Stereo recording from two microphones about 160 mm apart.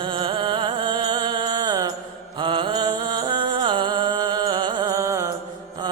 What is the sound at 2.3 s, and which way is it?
Music, 30° right (ahead or behind).